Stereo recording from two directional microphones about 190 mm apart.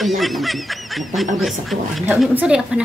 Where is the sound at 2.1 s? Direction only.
5° right (ahead or behind).